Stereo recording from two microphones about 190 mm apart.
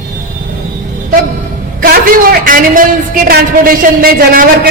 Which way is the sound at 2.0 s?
45° right (ahead or behind).